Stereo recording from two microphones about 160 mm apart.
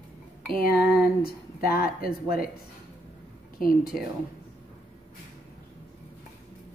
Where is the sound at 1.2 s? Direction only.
70° left (ahead or behind).